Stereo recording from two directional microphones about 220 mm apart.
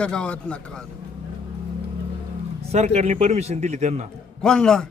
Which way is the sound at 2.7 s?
30° right (ahead or behind).